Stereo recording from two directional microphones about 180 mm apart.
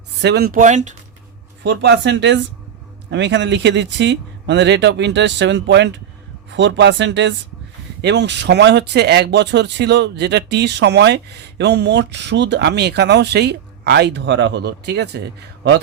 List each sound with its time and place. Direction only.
0.2 s speech: 65° right (ahead or behind); by 0.9 s 40° right (ahead or behind)
1.6 s speech: 75° right (ahead or behind)